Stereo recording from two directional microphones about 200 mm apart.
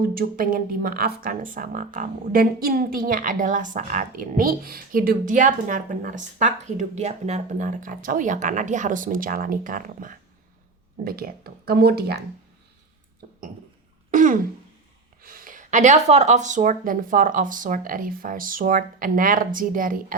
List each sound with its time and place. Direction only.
0.0 s speech: 45° right (ahead or behind)
14.1 s throat clearing: 40° right (ahead or behind)
15.2 s speech: 45° right (ahead or behind)